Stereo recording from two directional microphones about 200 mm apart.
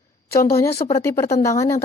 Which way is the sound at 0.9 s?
15° left (ahead or behind).